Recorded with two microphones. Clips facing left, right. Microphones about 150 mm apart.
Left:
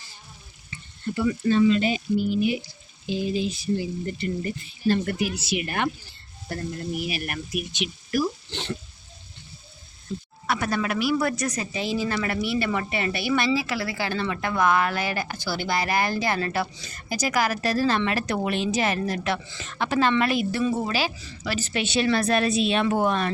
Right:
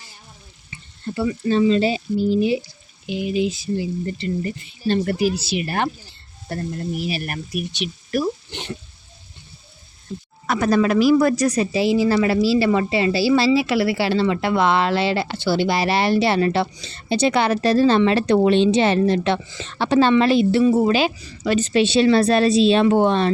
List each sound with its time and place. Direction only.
1.0 s speech: 35° right (ahead or behind)
3.1 s speech: 20° right (ahead or behind)
8.4 s speech: 15° right (ahead or behind)
10.4 s speech: 40° right (ahead or behind)
11.7 s speech: 80° right
12.0 s a woman's voice: 25° right (ahead or behind)